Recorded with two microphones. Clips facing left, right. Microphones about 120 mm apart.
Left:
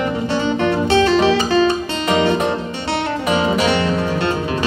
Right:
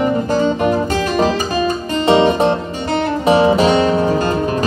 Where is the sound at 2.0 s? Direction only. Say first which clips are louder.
Right 5 dB; 30° right (ahead or behind).